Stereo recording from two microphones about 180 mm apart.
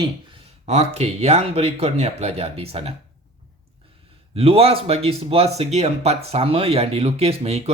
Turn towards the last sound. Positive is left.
turn(degrees=-35)  # may be behind; listen again after turning